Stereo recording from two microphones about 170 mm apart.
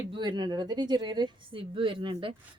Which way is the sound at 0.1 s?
25° right (ahead or behind).